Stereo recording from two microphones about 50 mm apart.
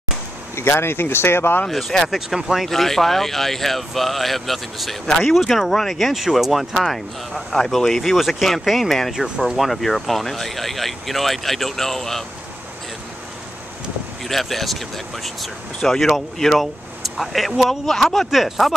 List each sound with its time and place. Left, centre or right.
0.6 s speech: left
1.7 s speech: centre
2.1 s speech: centre
2.6 s speech: centre
14.2 s speech: centre